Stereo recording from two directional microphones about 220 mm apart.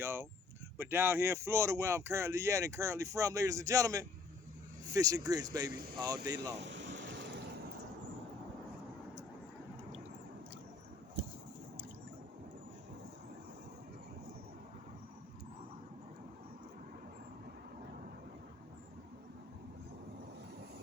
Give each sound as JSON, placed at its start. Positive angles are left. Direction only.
{"t": 0.0, "sound": "speech", "side_deg": -10}
{"t": 6.6, "sound": "ocean", "side_deg": -55}